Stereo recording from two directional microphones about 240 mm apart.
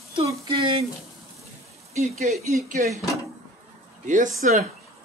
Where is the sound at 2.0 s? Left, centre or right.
Right.